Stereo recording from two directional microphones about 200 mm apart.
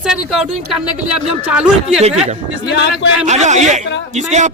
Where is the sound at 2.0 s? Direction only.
30° right (ahead or behind).